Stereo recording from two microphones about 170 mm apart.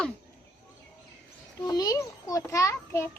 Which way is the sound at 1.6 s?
25° left (ahead or behind).